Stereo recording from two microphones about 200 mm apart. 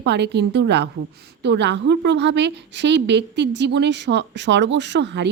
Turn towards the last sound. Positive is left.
turn(degrees=-60)  # may be behind; listen again after turning